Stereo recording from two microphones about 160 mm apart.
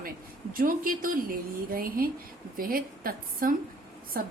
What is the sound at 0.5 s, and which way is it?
A woman's voice, 60° right (ahead or behind).